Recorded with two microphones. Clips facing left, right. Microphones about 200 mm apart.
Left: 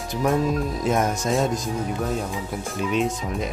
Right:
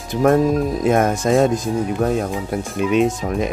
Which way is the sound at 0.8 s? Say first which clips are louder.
Right 5 dB; 55° right (ahead or behind).